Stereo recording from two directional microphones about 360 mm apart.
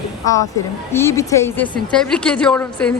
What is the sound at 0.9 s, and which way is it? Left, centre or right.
A woman's voice, centre.